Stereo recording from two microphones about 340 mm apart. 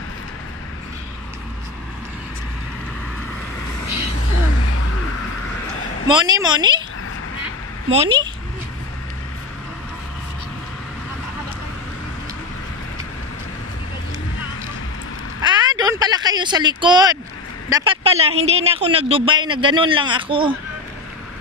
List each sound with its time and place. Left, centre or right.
6.1 s speech: centre
7.9 s speech: centre
15.4 s a sound: centre
17.6 s a man's voice: centre